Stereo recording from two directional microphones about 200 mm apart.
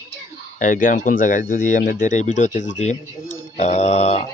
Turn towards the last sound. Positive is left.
turn(degrees=30)  # may be behind; listen again after turning